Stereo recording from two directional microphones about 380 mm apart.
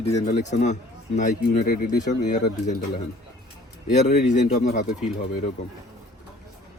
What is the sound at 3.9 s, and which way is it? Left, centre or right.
Speech, centre.